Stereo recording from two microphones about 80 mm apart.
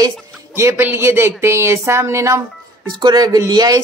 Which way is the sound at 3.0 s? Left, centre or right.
Right.